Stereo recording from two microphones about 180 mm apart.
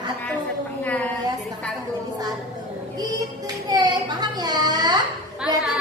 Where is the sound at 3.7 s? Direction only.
25° right (ahead or behind).